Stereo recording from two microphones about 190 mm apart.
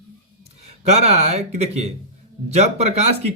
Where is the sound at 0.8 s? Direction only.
35° right (ahead or behind).